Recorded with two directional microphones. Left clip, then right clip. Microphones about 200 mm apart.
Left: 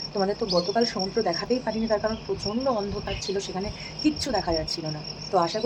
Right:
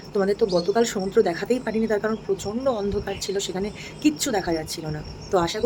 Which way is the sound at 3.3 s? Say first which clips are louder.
Right 4 dB; 30° right (ahead or behind).